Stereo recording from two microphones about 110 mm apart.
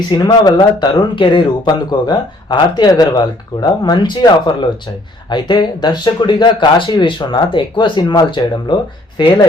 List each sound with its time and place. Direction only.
0.1 s speech: 40° left (ahead or behind)